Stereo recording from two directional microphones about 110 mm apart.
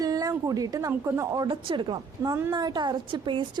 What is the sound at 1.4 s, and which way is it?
A woman's voice, 50° right (ahead or behind).